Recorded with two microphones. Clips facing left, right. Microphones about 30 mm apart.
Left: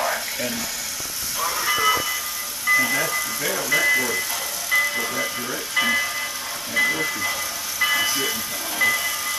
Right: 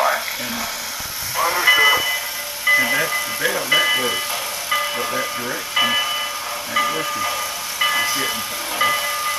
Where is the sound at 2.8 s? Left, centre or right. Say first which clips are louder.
Right 3 dB; right.